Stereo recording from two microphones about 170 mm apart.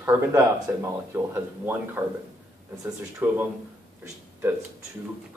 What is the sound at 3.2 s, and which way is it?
Speech, 10° right (ahead or behind).